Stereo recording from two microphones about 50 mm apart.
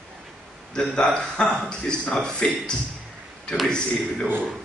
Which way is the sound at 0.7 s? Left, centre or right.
Centre.